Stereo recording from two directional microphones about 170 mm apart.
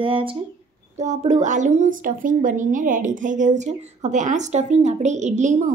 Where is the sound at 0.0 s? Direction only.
30° right (ahead or behind).